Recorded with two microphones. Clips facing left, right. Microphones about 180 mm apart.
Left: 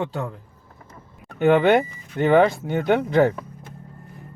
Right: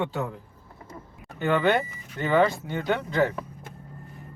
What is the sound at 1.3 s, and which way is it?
Speech, 65° left (ahead or behind).